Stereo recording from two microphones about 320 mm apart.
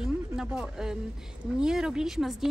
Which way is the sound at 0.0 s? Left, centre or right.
Centre.